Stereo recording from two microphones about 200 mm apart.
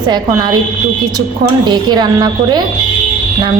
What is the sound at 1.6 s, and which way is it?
Speech, 20° right (ahead or behind).